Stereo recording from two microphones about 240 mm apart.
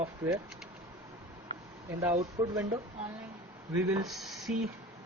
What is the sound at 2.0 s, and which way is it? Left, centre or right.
Speech, centre.